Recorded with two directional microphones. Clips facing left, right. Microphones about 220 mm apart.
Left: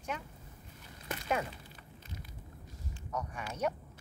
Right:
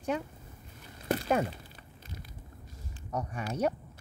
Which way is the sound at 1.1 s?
35° right (ahead or behind).